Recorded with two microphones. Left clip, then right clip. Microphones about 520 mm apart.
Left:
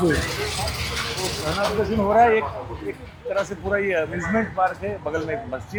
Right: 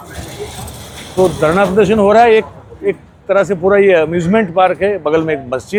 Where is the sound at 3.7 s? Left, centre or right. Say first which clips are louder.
Right 13 dB; right.